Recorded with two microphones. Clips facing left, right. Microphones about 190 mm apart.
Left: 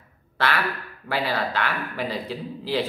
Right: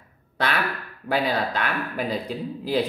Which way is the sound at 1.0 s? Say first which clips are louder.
Right 2 dB; 15° right (ahead or behind).